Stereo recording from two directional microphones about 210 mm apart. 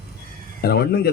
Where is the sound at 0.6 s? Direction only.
50° left (ahead or behind).